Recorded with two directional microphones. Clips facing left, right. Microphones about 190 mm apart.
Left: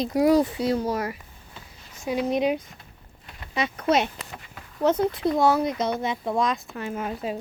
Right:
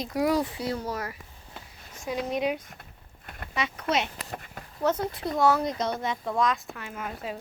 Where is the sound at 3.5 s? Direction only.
40° left (ahead or behind).